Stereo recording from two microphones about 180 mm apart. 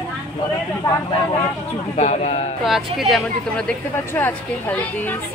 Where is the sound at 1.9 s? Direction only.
40° left (ahead or behind).